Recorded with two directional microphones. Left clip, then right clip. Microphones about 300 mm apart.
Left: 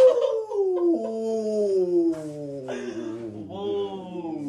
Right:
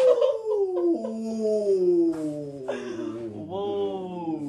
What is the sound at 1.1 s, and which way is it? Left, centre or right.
Dog, centre.